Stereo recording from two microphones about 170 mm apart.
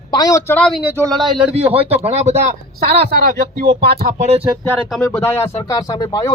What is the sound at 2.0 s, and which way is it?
Speech, 40° right (ahead or behind).